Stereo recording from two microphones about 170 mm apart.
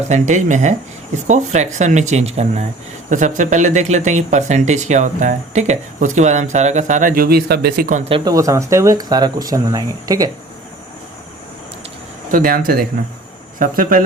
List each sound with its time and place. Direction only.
0.1 s speech: 45° right (ahead or behind); by 7.9 s 70° right (ahead or behind)
7.9 s speech: 45° right (ahead or behind)
8.1 s speech: 20° right (ahead or behind)
12.3 s speech: 50° right (ahead or behind)